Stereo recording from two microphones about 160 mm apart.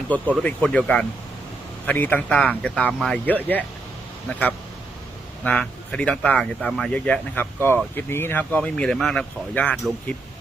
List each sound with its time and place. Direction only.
0.1 s speech: 10° left (ahead or behind)
5.4 s speech: 5° left (ahead or behind)